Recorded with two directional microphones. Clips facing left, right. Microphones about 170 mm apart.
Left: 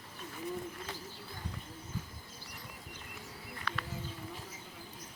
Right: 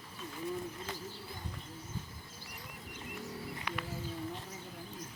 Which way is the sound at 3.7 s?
20° right (ahead or behind).